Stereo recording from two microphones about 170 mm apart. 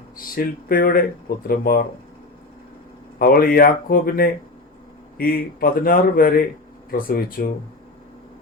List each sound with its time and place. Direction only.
0.2 s a man's voice: 60° left (ahead or behind)
3.2 s a man's voice: 60° left (ahead or behind)